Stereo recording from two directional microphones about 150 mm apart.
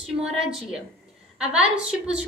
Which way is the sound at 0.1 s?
5° right (ahead or behind).